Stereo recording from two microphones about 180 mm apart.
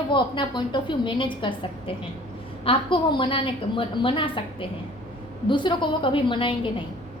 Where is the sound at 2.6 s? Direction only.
30° left (ahead or behind).